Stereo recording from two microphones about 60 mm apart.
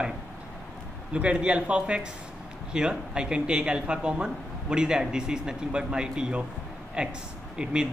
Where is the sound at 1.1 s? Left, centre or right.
Centre.